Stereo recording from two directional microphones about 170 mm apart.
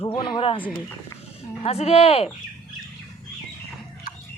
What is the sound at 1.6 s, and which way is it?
Speech, 35° left (ahead or behind).